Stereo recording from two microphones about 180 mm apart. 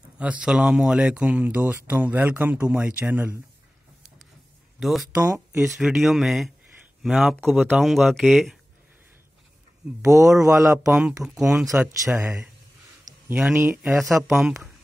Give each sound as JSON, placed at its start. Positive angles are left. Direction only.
{"t": 0.2, "sound": "speech", "side_deg": -5}
{"t": 4.7, "sound": "speech", "side_deg": 0}
{"t": 5.1, "sound": "speech", "side_deg": -15}
{"t": 5.8, "sound": "speech", "side_deg": 0}
{"t": 10.0, "sound": "speech", "side_deg": -15}
{"t": 10.9, "sound": "speech", "side_deg": -5}
{"t": 13.3, "sound": "speech", "side_deg": -5}